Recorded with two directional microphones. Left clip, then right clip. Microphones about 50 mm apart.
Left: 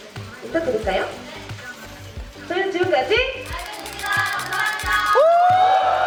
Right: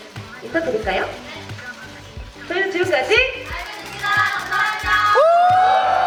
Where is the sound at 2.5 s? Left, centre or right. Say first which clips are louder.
Right 1 dB; centre.